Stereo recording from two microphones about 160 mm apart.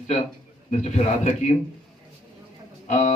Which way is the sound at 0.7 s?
45° left (ahead or behind).